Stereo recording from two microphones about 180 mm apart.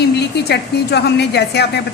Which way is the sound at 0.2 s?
65° left (ahead or behind).